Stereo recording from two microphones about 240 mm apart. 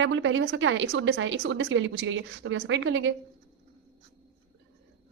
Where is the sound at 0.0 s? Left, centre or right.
Right.